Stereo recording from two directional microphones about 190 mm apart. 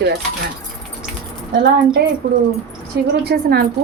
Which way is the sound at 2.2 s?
65° right (ahead or behind).